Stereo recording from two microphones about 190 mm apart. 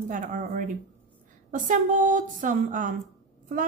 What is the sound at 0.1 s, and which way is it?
A woman's voice, 45° right (ahead or behind).